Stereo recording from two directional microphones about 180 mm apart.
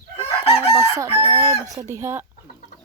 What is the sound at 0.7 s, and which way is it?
Chicken, 15° right (ahead or behind).